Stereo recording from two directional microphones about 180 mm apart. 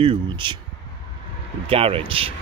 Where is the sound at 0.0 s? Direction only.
30° right (ahead or behind).